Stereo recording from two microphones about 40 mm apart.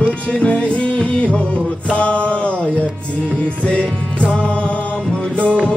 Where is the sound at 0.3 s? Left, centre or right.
Left.